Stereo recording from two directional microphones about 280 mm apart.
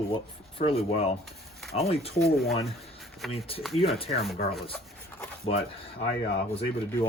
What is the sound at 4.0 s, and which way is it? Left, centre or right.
Speech, left.